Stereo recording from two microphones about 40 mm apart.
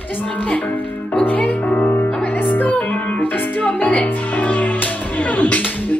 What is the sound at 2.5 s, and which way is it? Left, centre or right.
Music, left.